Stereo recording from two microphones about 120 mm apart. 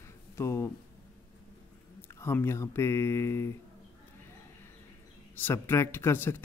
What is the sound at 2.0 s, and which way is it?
Speech, 20° left (ahead or behind).